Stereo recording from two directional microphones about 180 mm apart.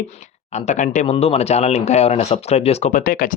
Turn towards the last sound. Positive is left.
turn(degrees=50)  # may be behind; listen again after turning